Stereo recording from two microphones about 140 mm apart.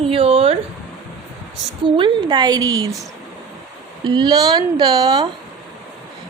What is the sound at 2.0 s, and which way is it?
Speech, 35° right (ahead or behind).